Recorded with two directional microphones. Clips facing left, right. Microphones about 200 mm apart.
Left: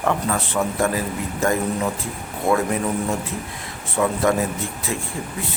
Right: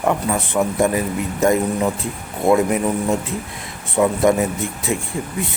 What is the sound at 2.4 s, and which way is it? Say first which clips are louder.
Speech: right 5 dB; 20° right (ahead or behind).